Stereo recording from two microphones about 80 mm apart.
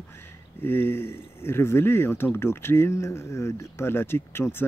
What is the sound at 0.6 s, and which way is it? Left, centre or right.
Speech, left.